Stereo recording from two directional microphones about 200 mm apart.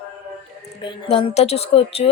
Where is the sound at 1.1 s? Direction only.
25° left (ahead or behind).